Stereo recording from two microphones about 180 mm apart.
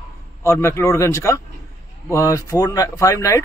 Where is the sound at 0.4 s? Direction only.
15° left (ahead or behind).